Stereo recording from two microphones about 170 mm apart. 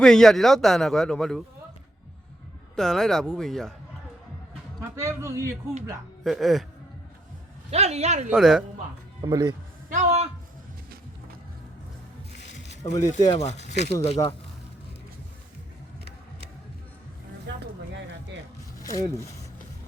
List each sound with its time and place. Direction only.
0.0 s a man's voice: 5° left (ahead or behind)
2.7 s a man's voice: centre (ahead or behind)
4.8 s a man's voice: 15° right (ahead or behind)
6.2 s a man's voice: centre (ahead or behind)
7.7 s speech: 40° right (ahead or behind)
8.3 s a man's voice: centre (ahead or behind)
9.2 s speech: 25° right (ahead or behind)
9.9 s a sound: 40° right (ahead or behind)
12.9 s speech: 45° left (ahead or behind)
17.5 s a sound: 90° right
18.8 s speech: 20° left (ahead or behind)